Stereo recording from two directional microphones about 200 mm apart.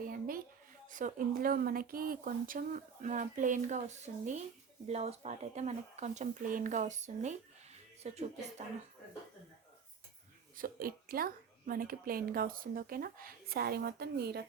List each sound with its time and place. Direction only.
0.0 s a sound: 45° right (ahead or behind)
0.9 s speech: 40° right (ahead or behind)
10.6 s a woman's voice: 45° right (ahead or behind)